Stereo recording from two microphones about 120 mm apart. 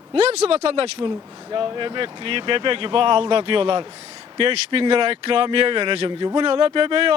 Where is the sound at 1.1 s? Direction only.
35° right (ahead or behind).